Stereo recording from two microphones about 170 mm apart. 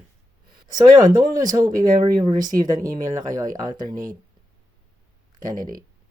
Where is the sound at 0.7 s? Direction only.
25° right (ahead or behind).